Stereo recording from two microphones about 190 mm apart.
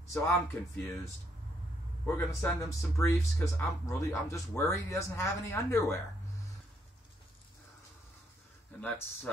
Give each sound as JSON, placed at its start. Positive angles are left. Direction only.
{"t": 0.0, "sound": "speech", "side_deg": 15}
{"t": 2.0, "sound": "speech", "side_deg": 10}
{"t": 8.8, "sound": "speech", "side_deg": 10}